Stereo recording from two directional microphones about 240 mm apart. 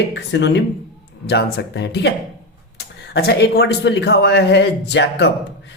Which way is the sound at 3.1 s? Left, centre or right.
Left.